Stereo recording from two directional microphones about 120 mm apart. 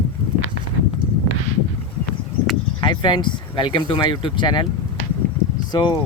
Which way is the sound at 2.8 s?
40° left (ahead or behind).